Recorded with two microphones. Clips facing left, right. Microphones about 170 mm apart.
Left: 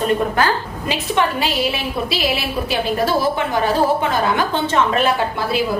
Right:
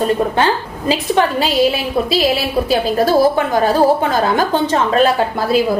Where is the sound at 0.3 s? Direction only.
30° right (ahead or behind).